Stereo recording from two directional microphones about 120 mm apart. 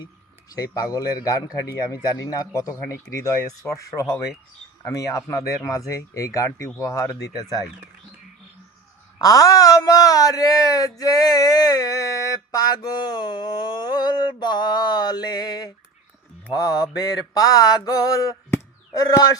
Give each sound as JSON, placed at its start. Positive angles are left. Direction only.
{"t": 0.5, "sound": "speech", "side_deg": 30}
{"t": 9.1, "sound": "speech", "side_deg": 30}